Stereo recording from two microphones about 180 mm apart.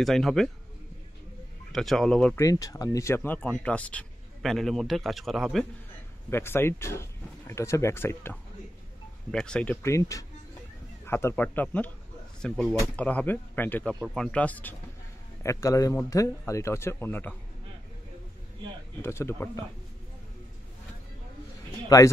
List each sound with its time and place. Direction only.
0.0 s speech: centre (ahead or behind)
1.7 s speech: centre (ahead or behind)
2.3 s speech: 15° left (ahead or behind); by 5.7 s centre (ahead or behind)
6.3 s speech: 15° left (ahead or behind)
18.9 s speech: 15° left (ahead or behind)
21.8 s a man's voice: 20° left (ahead or behind)